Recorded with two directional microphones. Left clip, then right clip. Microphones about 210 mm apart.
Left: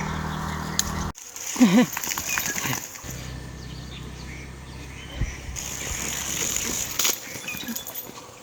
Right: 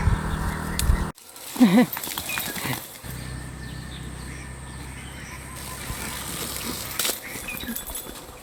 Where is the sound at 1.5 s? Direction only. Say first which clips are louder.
Right 1 dB; centre (ahead or behind).